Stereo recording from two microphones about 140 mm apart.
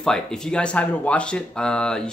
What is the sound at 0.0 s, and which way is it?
Speech, 5° left (ahead or behind).